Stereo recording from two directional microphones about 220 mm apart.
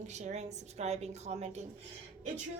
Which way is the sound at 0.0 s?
30° right (ahead or behind).